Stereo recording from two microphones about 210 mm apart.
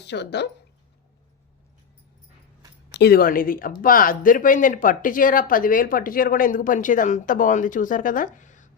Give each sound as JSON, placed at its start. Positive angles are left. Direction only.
{"t": 0.0, "sound": "speech", "side_deg": 55}
{"t": 2.9, "sound": "a woman's voice", "side_deg": 50}